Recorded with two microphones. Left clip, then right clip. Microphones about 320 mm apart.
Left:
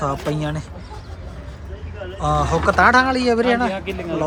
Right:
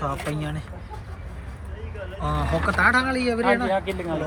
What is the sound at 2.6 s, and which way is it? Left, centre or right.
Speech, centre.